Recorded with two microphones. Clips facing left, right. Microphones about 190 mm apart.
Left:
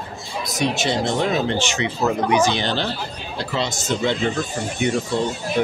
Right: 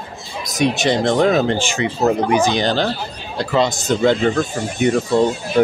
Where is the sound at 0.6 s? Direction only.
55° right (ahead or behind).